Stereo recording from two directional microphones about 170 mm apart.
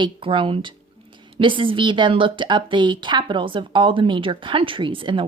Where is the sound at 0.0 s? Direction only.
30° right (ahead or behind).